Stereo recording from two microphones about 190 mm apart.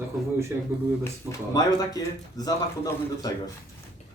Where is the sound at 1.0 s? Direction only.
15° left (ahead or behind).